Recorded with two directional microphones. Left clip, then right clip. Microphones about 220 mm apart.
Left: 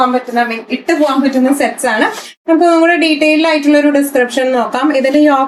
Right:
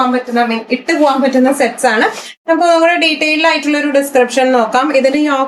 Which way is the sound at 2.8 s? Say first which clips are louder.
Left 1 dB; 25° right (ahead or behind).